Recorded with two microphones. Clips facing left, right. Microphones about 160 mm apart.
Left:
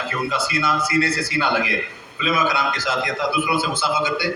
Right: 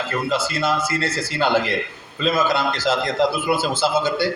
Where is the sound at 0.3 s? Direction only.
60° left (ahead or behind).